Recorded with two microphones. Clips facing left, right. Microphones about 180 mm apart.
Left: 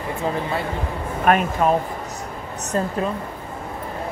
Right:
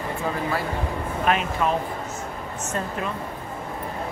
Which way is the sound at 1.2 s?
50° left (ahead or behind).